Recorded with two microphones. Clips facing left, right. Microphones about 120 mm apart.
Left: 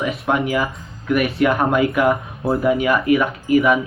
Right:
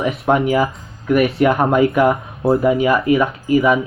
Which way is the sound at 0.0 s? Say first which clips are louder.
Right 4 dB; 30° right (ahead or behind).